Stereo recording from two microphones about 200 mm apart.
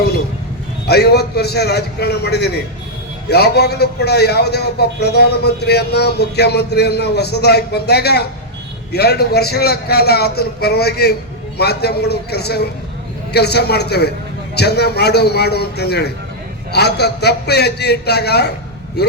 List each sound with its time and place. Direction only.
0.9 s a man's voice: 55° left (ahead or behind)